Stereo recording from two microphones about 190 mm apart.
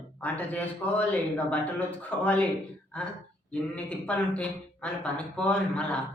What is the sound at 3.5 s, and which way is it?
Speech, 5° left (ahead or behind).